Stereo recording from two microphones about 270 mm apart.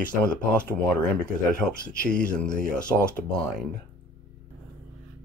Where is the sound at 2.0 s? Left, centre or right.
Left.